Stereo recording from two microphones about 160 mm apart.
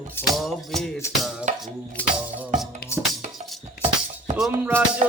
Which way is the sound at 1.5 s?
50° right (ahead or behind).